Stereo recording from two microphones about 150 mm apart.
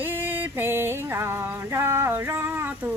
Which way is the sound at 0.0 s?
15° right (ahead or behind).